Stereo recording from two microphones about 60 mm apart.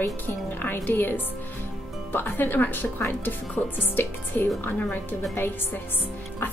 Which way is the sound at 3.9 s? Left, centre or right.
Left.